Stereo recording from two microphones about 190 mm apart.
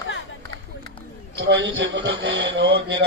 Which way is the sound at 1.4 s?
70° right (ahead or behind).